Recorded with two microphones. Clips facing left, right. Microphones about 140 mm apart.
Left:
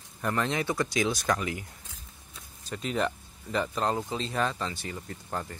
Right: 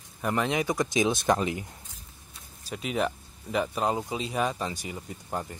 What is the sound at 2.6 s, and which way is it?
Speech, 10° right (ahead or behind).